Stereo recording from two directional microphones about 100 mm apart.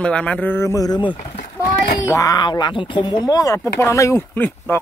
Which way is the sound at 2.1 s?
35° left (ahead or behind).